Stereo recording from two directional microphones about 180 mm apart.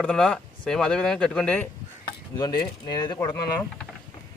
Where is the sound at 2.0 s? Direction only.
25° left (ahead or behind).